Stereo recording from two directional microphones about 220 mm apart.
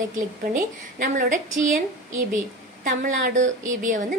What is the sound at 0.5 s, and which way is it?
A woman's voice, 35° right (ahead or behind).